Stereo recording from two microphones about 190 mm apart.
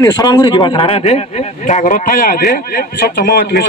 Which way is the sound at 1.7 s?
40° left (ahead or behind).